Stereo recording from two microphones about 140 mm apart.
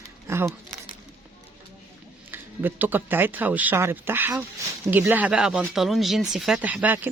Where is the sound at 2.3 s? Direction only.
15° right (ahead or behind).